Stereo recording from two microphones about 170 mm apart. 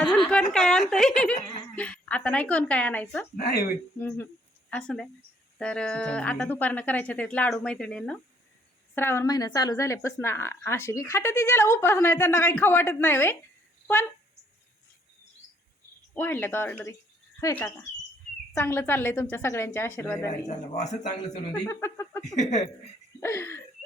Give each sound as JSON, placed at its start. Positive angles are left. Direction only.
{"t": 0.3, "sound": "a woman's voice", "side_deg": 5}
{"t": 4.7, "sound": "a woman's voice", "side_deg": 5}
{"t": 16.1, "sound": "a woman's voice", "side_deg": 10}
{"t": 20.5, "sound": "speech", "side_deg": 45}
{"t": 21.3, "sound": "a woman's voice", "side_deg": 25}
{"t": 22.4, "sound": "speech", "side_deg": 40}
{"t": 23.2, "sound": "a woman's voice", "side_deg": 15}